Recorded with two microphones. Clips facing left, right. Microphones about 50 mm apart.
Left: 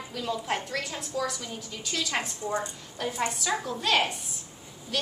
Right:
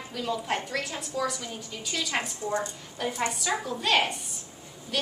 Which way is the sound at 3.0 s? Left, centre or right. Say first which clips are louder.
Even; centre.